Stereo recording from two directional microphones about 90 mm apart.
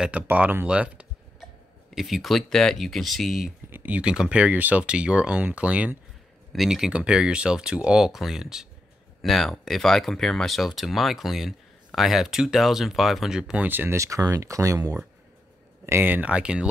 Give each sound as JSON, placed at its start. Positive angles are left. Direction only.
{"t": 0.0, "sound": "speech", "side_deg": -15}
{"t": 2.0, "sound": "speech", "side_deg": 0}
{"t": 3.7, "sound": "speech", "side_deg": -20}
{"t": 6.5, "sound": "speech", "side_deg": -5}
{"t": 13.7, "sound": "speech", "side_deg": -20}
{"t": 13.9, "sound": "speech", "side_deg": -35}
{"t": 15.8, "sound": "speech", "side_deg": -25}